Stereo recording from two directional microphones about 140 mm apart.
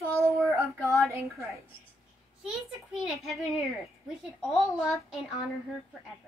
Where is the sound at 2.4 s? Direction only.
5° right (ahead or behind).